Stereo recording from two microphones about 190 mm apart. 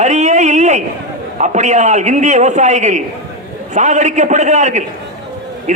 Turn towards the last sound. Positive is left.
turn(degrees=-40)  # may be behind; listen again after turning